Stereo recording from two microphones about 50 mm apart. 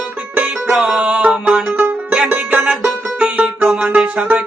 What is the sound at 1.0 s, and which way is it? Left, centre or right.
Music, right.